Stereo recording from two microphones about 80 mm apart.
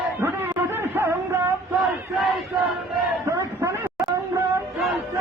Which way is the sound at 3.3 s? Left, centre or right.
Right.